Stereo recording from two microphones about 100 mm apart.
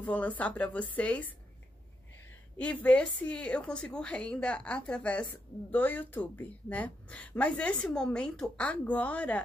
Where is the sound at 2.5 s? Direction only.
15° left (ahead or behind).